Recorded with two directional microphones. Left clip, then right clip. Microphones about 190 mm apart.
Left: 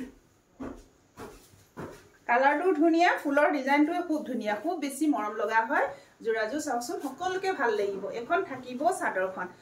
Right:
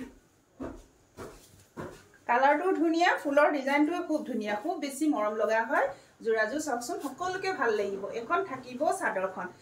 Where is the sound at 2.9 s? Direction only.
20° left (ahead or behind).